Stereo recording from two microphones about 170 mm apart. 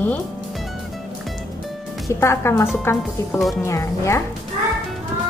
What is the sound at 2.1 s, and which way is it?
Speech, 15° left (ahead or behind).